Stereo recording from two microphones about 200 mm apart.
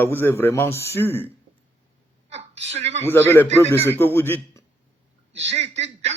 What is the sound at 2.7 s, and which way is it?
Speech, 30° right (ahead or behind).